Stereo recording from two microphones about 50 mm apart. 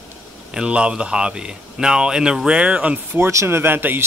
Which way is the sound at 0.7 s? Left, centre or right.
Right.